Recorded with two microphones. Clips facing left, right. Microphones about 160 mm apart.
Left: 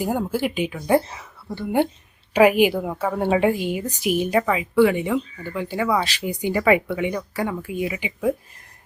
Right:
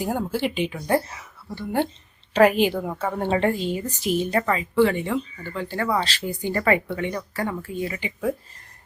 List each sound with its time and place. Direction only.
0.0 s a woman's voice: 10° left (ahead or behind)
0.9 s speech: 25° left (ahead or behind)
2.3 s a woman's voice: 10° left (ahead or behind)